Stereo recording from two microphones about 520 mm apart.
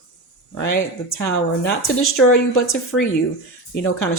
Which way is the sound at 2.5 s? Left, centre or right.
Left.